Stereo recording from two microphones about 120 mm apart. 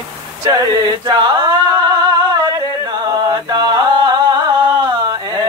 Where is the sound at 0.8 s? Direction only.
40° right (ahead or behind).